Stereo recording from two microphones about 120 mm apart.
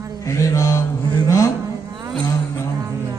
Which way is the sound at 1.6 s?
35° right (ahead or behind).